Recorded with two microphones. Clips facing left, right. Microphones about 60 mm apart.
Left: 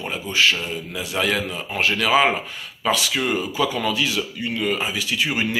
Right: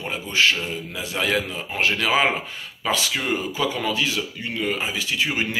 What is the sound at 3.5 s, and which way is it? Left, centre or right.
Speech, right.